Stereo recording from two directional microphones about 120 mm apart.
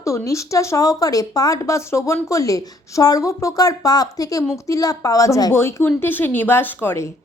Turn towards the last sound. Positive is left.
turn(degrees=20)  # may be behind; listen again after turning